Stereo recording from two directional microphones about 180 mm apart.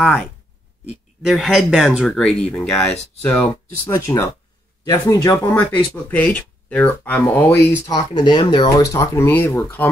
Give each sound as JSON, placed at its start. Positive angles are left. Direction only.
{"t": 1.2, "sound": "speech", "side_deg": 0}